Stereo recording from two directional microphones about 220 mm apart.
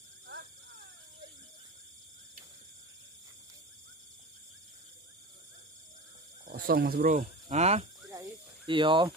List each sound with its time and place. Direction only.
0.3 s a sound: 50° right (ahead or behind)
6.4 s speech: 40° right (ahead or behind)
8.1 s snake: 20° right (ahead or behind)